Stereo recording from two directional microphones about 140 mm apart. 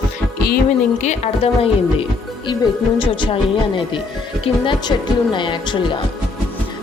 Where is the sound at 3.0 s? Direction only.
35° left (ahead or behind).